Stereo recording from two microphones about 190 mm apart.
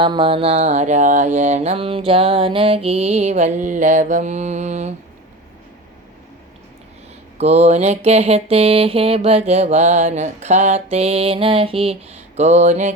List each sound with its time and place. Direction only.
0.0 s mantra: 25° right (ahead or behind)
7.3 s mantra: 35° right (ahead or behind)